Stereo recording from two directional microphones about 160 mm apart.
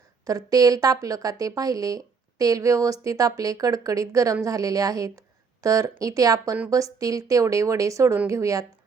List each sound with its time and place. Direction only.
0.3 s a woman's voice: 20° right (ahead or behind)